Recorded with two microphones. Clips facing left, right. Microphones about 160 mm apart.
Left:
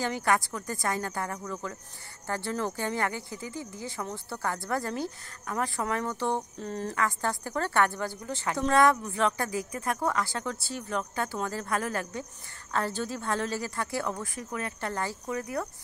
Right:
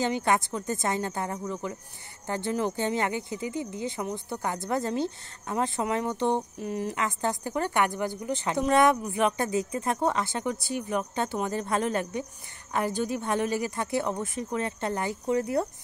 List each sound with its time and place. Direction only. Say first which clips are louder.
0.0 s speech: right 2 dB; 20° right (ahead or behind)